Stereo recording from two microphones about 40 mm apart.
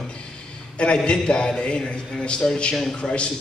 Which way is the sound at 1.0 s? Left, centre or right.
Left.